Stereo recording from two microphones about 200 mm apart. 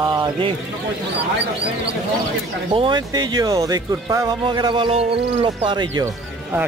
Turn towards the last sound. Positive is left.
turn(degrees=-20)  # may be behind; listen again after turning